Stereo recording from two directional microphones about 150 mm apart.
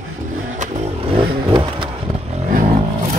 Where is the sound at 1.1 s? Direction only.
35° right (ahead or behind).